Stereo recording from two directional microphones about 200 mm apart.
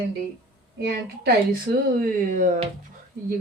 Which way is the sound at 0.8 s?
55° right (ahead or behind).